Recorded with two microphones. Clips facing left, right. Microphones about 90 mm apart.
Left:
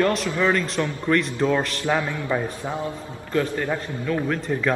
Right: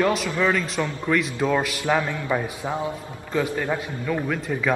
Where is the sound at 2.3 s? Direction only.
10° right (ahead or behind).